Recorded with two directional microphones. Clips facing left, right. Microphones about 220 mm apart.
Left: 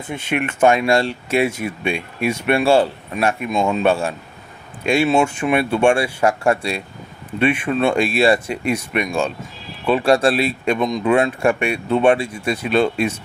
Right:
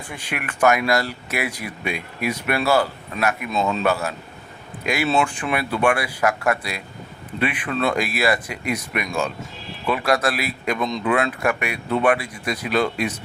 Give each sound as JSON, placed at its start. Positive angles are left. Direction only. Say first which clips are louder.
{"t": 0.1, "sound": "speech", "louder": "left 9 dB", "side_deg": 25}
{"t": 3.5, "sound": "a man's voice", "louder": "left 4 dB", "side_deg": 10}
{"t": 3.8, "sound": "speech", "louder": "left 4 dB", "side_deg": 30}